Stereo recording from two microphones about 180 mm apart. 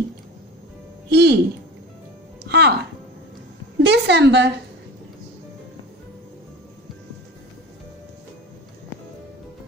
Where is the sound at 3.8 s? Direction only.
70° right (ahead or behind).